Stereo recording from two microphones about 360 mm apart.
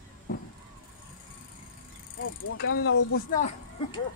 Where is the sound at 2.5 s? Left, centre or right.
Left.